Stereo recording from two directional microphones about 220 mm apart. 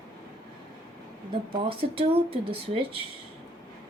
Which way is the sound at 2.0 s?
25° right (ahead or behind).